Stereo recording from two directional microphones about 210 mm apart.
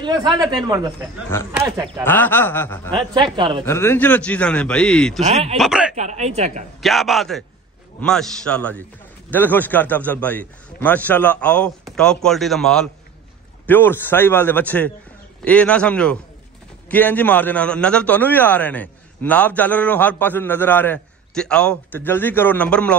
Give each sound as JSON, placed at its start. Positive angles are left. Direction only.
{"t": 0.0, "sound": "speech", "side_deg": -20}
{"t": 1.3, "sound": "a man's voice", "side_deg": 10}
{"t": 1.7, "sound": "speech", "side_deg": -10}
{"t": 2.0, "sound": "a man's voice", "side_deg": 10}
{"t": 3.3, "sound": "speech", "side_deg": -25}
{"t": 3.6, "sound": "speech", "side_deg": 10}
{"t": 5.2, "sound": "speech", "side_deg": -30}
{"t": 5.6, "sound": "speech", "side_deg": -5}
{"t": 5.9, "sound": "speech", "side_deg": -35}
{"t": 6.8, "sound": "a man's voice", "side_deg": 0}